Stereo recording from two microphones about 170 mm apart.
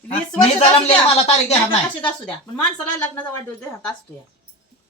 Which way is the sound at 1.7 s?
5° left (ahead or behind).